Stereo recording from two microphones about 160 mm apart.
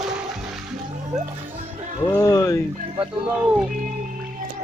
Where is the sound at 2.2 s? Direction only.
20° left (ahead or behind).